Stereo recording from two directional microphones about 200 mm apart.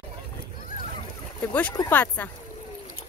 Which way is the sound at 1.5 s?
5° left (ahead or behind).